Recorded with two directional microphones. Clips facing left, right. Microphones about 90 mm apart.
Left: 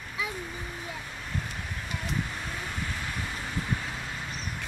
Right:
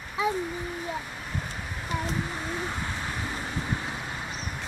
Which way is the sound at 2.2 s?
20° right (ahead or behind).